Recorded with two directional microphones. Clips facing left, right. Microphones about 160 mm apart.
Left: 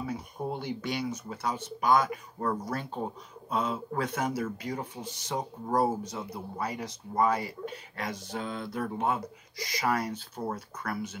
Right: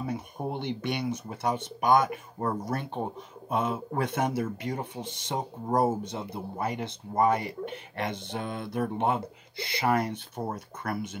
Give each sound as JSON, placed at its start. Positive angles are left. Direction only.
{"t": 0.0, "sound": "a sound", "side_deg": -25}
{"t": 0.9, "sound": "speech", "side_deg": -25}
{"t": 3.5, "sound": "speech", "side_deg": -25}